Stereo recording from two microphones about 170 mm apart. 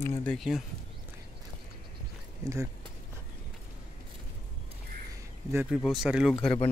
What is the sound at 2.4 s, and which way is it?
Speech, 15° right (ahead or behind).